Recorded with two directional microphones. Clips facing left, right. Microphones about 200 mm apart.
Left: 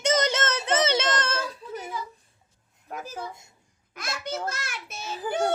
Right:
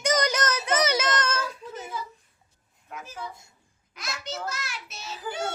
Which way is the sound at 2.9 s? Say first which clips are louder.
Left 5 dB; 40° left (ahead or behind).